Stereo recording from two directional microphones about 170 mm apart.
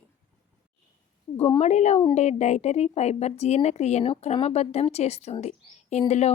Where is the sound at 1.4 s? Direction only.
35° left (ahead or behind).